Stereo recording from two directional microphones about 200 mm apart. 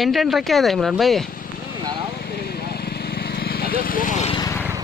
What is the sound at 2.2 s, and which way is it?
Vehicle, 50° left (ahead or behind).